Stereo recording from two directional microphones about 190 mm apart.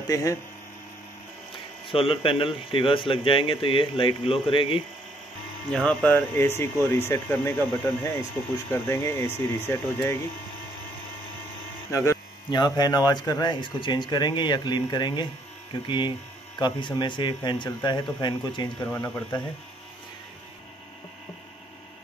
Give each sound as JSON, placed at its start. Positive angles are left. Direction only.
{"t": 0.1, "sound": "speech", "side_deg": 15}
{"t": 1.9, "sound": "speech", "side_deg": 30}
{"t": 5.7, "sound": "speech", "side_deg": 5}
{"t": 11.9, "sound": "speech", "side_deg": 15}
{"t": 16.5, "sound": "speech", "side_deg": 25}
{"t": 18.9, "sound": "speech", "side_deg": 10}